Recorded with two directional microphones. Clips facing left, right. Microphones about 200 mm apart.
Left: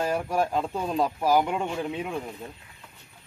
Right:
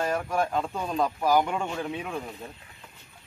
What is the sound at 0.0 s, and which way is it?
Speech, 10° left (ahead or behind).